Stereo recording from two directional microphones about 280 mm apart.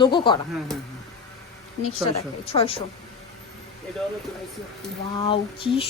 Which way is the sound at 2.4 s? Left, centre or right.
Centre.